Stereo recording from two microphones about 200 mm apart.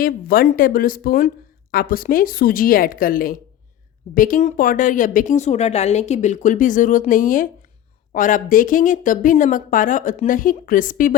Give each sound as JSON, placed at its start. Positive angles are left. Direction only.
{"t": 0.0, "sound": "a woman's voice", "side_deg": 45}